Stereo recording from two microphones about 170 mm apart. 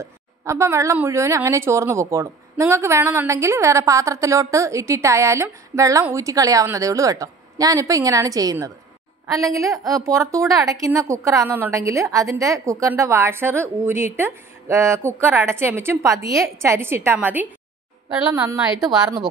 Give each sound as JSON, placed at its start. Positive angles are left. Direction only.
{"t": 0.0, "sound": "a woman's voice", "side_deg": -15}
{"t": 18.8, "sound": "a woman's voice", "side_deg": 0}